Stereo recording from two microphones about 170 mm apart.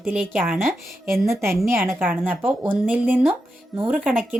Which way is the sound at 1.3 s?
15° right (ahead or behind).